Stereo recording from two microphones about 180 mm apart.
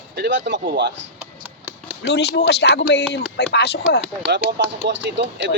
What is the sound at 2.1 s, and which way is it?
Speech, 70° left (ahead or behind).